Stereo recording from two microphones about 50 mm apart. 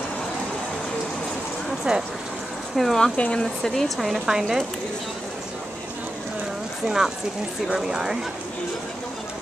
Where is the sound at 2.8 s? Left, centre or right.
Centre.